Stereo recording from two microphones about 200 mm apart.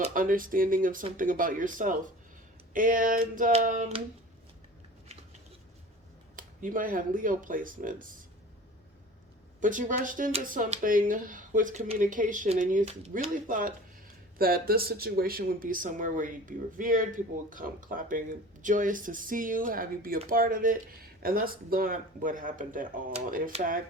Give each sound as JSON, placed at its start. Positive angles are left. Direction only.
{"t": 0.0, "sound": "speech", "side_deg": -40}
{"t": 6.3, "sound": "speech", "side_deg": -40}
{"t": 9.6, "sound": "speech", "side_deg": -40}